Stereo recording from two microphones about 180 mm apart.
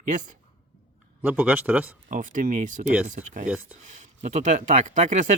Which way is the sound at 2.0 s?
45° right (ahead or behind).